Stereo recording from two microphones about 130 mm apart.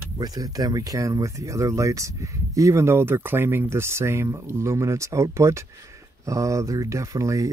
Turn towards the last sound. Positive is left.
turn(degrees=-25)  # may be behind; listen again after turning